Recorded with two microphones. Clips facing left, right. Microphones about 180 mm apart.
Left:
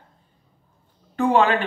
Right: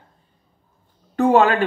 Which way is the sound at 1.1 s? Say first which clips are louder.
Right 3 dB; 40° right (ahead or behind).